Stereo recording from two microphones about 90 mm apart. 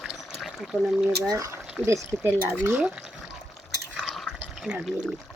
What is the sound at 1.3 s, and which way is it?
Speech, 40° right (ahead or behind).